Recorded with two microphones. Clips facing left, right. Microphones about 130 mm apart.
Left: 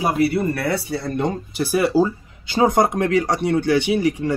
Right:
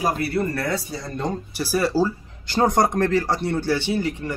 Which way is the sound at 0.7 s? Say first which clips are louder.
Left 4 dB; 65° left (ahead or behind).